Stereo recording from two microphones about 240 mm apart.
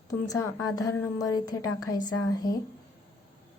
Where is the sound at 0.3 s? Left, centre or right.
Centre.